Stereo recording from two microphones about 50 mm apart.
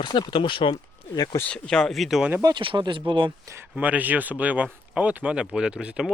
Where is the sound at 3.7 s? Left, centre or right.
Right.